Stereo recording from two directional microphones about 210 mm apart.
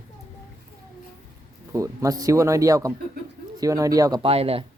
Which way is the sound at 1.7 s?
15° right (ahead or behind).